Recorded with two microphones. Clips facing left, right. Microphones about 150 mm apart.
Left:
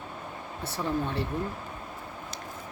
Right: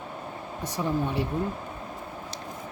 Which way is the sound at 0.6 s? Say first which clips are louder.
Right 2 dB; 15° right (ahead or behind).